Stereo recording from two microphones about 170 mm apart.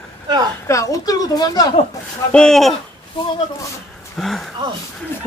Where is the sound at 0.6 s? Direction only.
20° left (ahead or behind).